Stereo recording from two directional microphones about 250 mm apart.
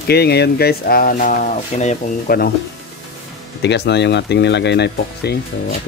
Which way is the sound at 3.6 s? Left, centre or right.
Left.